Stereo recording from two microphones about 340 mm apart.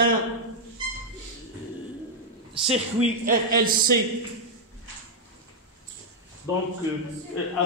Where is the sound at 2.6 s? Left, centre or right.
Centre.